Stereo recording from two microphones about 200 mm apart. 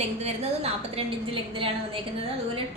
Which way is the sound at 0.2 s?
30° right (ahead or behind).